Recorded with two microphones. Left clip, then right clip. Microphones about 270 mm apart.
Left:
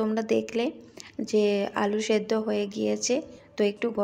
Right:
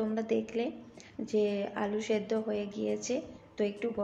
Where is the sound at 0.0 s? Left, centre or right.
Left.